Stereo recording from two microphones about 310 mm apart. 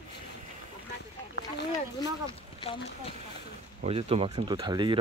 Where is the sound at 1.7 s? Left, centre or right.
Centre.